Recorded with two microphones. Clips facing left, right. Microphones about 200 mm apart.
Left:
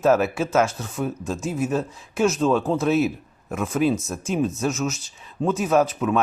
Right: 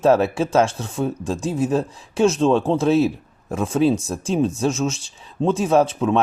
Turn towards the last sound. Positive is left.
turn(degrees=-30)  # may be behind; listen again after turning